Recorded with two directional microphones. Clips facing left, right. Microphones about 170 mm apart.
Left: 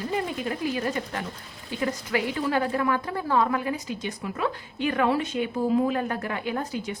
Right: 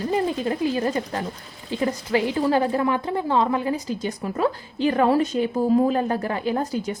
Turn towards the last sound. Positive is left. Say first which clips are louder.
# right 5 dB
turn(degrees=-40)  # may be behind; listen again after turning